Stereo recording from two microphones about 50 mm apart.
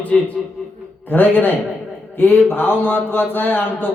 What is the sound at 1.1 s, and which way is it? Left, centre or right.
Speech, left.